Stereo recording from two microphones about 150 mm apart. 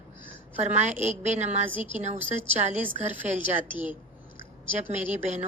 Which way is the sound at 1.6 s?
10° right (ahead or behind).